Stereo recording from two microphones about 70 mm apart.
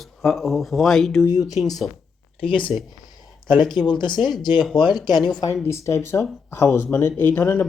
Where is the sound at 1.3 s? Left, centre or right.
Left.